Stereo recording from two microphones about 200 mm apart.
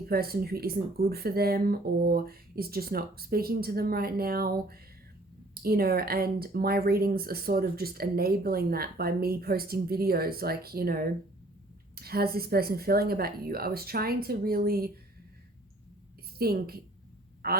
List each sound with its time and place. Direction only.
0.0 s speech: 50° right (ahead or behind)
16.4 s a man's voice: 50° right (ahead or behind)